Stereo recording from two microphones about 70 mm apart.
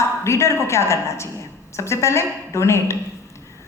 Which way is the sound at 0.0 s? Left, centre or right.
Left.